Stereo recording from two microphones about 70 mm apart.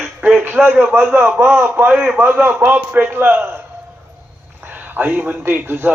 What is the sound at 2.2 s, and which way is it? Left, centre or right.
A man's voice, right.